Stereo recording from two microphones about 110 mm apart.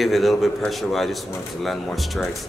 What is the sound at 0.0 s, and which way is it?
A man's voice, centre (ahead or behind).